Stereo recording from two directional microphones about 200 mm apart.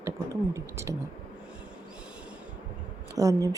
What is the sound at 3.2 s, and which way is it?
Speech, 15° right (ahead or behind).